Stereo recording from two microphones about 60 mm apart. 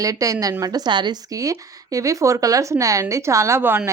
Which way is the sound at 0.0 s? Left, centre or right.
Right.